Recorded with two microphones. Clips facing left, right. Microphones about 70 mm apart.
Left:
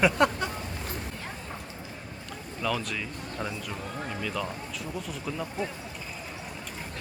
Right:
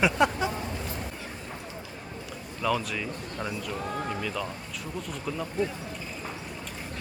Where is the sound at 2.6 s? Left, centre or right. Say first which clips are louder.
Right 2 dB; centre.